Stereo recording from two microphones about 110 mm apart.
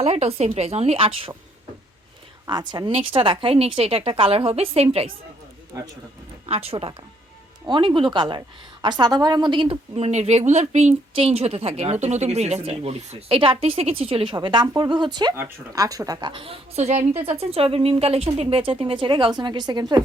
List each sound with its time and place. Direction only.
0.0 s speech: 70° right (ahead or behind)
2.5 s speech: 40° right (ahead or behind)
2.9 s a woman's voice: 55° right (ahead or behind)
5.7 s speech: 30° right (ahead or behind)
6.5 s a woman's voice: 60° right (ahead or behind)
7.7 s a woman's voice: 45° right (ahead or behind)
9.9 s speech: 80° right
12.6 s a woman's voice: 70° right (ahead or behind)
14.3 s a woman's voice: 45° right (ahead or behind)
15.7 s speech: 30° right (ahead or behind)
16.3 s a woman's voice: 55° right (ahead or behind)
16.7 s a woman's voice: 90° right
17.2 s a woman's voice: 65° right (ahead or behind); by 20.0 s 40° right (ahead or behind)